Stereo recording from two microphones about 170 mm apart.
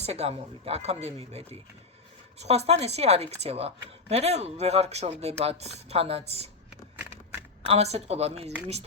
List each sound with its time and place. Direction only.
0.0 s speech: 35° right (ahead or behind)
7.6 s speech: 35° right (ahead or behind)